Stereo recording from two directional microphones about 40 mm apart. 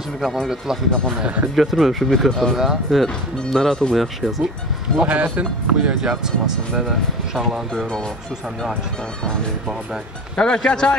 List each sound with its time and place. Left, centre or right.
1.1 s speech: right
1.5 s speech: centre
2.5 s speech: centre
2.9 s speech: centre
5.0 s speech: right
5.9 s speech: centre
10.3 s speech: centre